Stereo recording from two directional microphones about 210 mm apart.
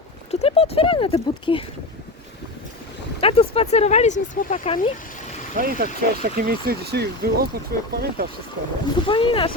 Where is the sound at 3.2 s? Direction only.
25° left (ahead or behind).